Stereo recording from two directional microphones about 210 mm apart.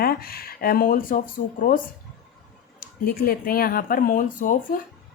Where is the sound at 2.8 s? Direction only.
45° left (ahead or behind).